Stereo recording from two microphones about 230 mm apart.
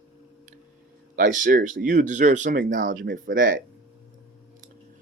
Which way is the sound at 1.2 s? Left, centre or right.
Right.